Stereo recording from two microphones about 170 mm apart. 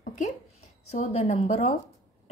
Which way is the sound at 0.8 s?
40° left (ahead or behind).